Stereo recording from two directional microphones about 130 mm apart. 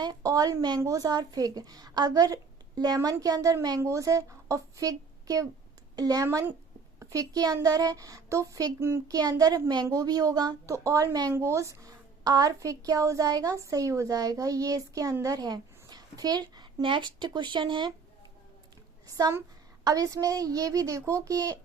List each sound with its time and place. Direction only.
0.0 s a woman's voice: 30° right (ahead or behind)
6.2 s speech: 15° right (ahead or behind)
7.0 s a woman's voice: 25° right (ahead or behind)
19.0 s a woman's voice: 25° right (ahead or behind)